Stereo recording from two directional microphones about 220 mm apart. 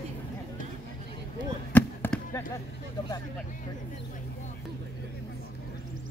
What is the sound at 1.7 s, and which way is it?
Basketball bounce, 10° left (ahead or behind).